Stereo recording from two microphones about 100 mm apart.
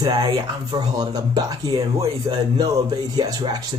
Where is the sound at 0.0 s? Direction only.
45° right (ahead or behind).